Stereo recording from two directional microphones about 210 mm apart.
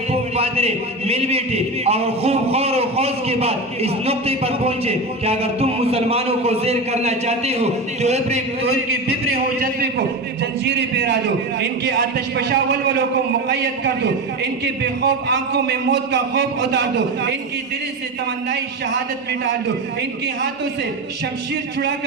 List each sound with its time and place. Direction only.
0.1 s a man's voice: 30° right (ahead or behind)
9.3 s a man's voice: 45° right (ahead or behind)
10.6 s a man's voice: 55° right (ahead or behind)